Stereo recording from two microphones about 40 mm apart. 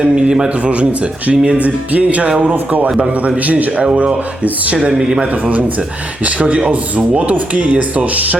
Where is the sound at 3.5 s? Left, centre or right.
Right.